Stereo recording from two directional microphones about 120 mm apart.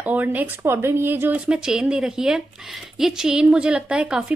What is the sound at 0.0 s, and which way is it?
Speech, 15° right (ahead or behind).